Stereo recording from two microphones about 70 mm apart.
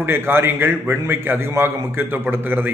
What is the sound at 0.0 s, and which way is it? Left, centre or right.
A man's voice, right.